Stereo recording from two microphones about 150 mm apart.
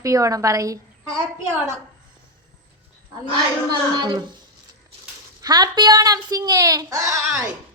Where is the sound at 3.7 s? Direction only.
30° right (ahead or behind).